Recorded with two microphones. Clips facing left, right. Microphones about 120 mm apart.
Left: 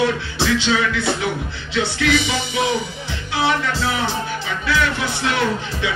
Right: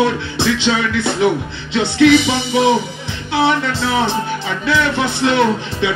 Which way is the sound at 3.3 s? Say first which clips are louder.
Right 4 dB; 25° right (ahead or behind).